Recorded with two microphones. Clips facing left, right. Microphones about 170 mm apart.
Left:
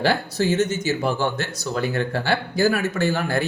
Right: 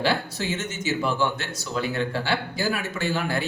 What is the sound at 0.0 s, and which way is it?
Speech, 40° left (ahead or behind).